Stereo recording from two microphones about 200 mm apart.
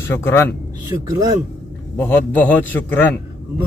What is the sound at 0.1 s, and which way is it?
Speech, 10° left (ahead or behind).